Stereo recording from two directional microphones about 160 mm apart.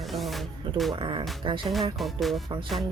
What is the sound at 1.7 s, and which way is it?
Music, centre (ahead or behind).